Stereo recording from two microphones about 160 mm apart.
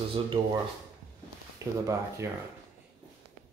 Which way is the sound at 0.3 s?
35° right (ahead or behind).